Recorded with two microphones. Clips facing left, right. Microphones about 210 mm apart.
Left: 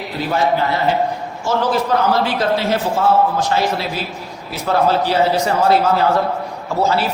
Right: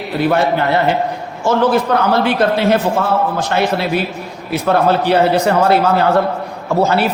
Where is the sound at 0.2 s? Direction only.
65° right (ahead or behind).